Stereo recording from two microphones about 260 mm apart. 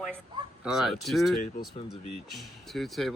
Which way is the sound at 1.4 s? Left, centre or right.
Left.